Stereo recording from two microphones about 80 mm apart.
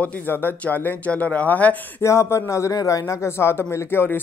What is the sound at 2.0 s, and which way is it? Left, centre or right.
Speech, left.